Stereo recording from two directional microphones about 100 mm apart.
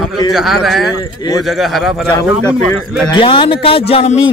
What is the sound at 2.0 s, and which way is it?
Speech, 20° left (ahead or behind).